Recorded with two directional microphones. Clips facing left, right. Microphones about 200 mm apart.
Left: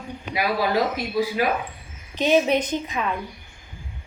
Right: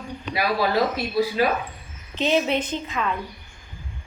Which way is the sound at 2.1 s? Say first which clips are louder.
Left 3 dB; 15° left (ahead or behind).